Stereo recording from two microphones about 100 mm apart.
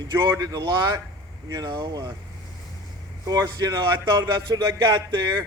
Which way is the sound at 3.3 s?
40° right (ahead or behind).